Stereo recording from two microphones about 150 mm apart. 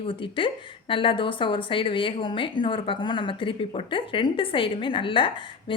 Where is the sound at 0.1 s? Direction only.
35° left (ahead or behind).